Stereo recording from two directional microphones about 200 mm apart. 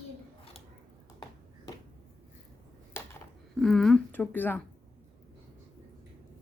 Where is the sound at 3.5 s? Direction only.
Centre (ahead or behind).